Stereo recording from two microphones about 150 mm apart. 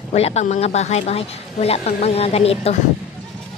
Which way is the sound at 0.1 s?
45° left (ahead or behind).